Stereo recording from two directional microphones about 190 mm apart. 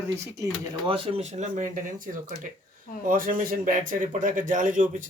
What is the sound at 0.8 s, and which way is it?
Speech, 30° right (ahead or behind).